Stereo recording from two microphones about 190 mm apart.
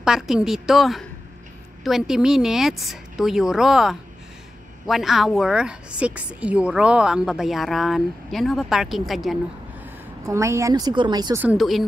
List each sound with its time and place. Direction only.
0.0 s a woman's voice: 5° right (ahead or behind)
10.2 s speech: 15° right (ahead or behind)
11.4 s a woman's voice: centre (ahead or behind)